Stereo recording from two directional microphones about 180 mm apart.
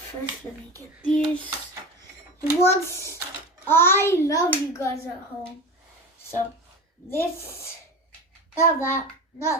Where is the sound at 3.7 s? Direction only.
10° left (ahead or behind).